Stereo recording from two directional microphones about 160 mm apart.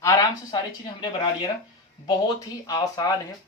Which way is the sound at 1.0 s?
25° left (ahead or behind).